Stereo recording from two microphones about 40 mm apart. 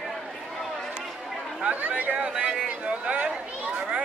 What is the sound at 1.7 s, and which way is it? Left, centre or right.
Chatter, right.